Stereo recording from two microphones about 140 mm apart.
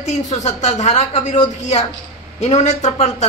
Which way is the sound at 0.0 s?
55° left (ahead or behind).